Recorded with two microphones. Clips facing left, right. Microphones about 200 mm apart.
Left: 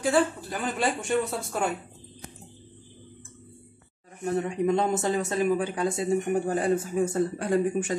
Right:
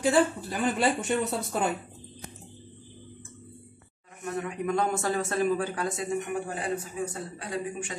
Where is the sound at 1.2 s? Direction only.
20° right (ahead or behind).